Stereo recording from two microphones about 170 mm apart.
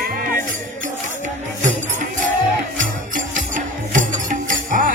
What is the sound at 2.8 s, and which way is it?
Music, 50° right (ahead or behind).